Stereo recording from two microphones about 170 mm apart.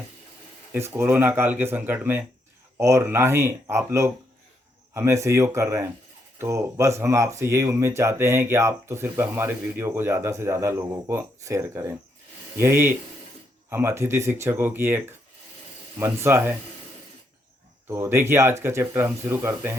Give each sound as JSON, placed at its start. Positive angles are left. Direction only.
{"t": 0.7, "sound": "speech", "side_deg": -15}
{"t": 17.8, "sound": "speech", "side_deg": -15}